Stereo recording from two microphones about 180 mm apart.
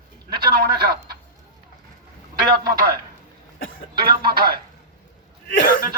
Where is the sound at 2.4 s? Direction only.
55° right (ahead or behind).